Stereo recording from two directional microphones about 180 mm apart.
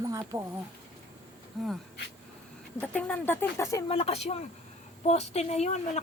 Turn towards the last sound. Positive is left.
turn(degrees=35)  # may be behind; listen again after turning